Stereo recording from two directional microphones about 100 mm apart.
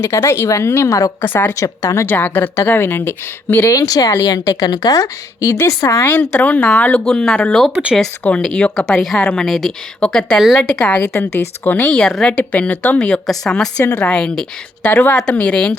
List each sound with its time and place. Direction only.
0.0 s speech: 25° left (ahead or behind)
1.2 s speech: 20° left (ahead or behind)
1.5 s a woman's voice: 35° left (ahead or behind)
2.0 s a woman's voice: 20° left (ahead or behind)
6.1 s speech: 15° left (ahead or behind)
11.1 s speech: 25° left (ahead or behind)